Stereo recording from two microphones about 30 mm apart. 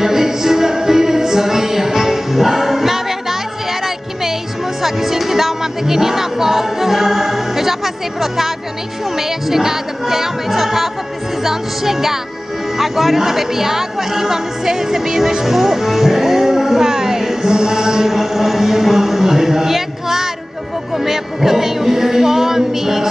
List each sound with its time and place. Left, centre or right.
0.0 s music: centre
3.8 s child singing: centre
4.8 s speech: centre
9.1 s music: centre
12.7 s a woman's voice: centre
17.5 s a sound: right
18.0 s a sound: centre
20.9 s music: centre